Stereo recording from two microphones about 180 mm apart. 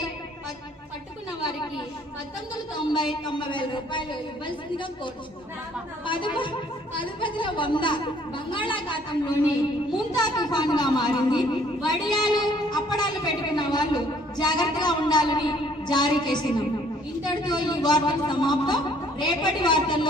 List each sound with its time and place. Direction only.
2.9 s a woman's voice: 25° left (ahead or behind)
6.1 s a woman's voice: 25° left (ahead or behind)